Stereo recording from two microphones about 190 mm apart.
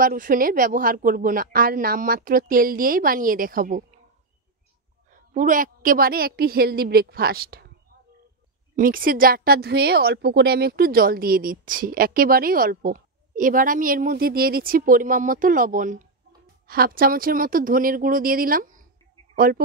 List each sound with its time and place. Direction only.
0.0 s a woman's voice: 45° right (ahead or behind)
5.1 s a woman's voice: 45° right (ahead or behind)
8.7 s a woman's voice: 50° right (ahead or behind)